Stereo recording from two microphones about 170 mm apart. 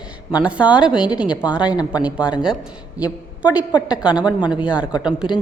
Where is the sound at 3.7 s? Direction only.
25° left (ahead or behind).